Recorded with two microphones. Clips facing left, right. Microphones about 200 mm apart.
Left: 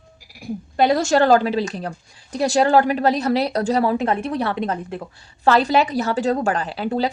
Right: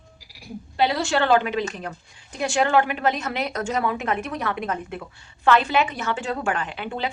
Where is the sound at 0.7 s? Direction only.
45° left (ahead or behind).